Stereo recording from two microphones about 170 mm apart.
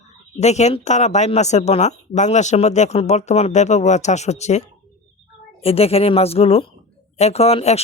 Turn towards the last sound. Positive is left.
turn(degrees=35)  # may be behind; listen again after turning